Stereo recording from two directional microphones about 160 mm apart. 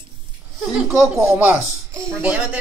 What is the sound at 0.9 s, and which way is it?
Speech, 15° right (ahead or behind).